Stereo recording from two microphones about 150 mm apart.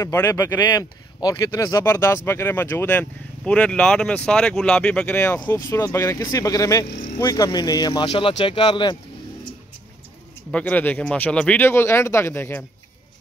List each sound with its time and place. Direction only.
0.0 s speech: 20° left (ahead or behind)
8.1 s speech: 35° left (ahead or behind)
10.5 s speech: 10° left (ahead or behind)